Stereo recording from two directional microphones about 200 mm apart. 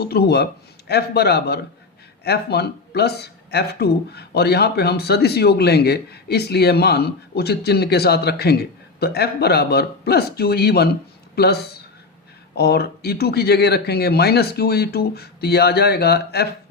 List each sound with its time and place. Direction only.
0.0 s speech: 55° left (ahead or behind)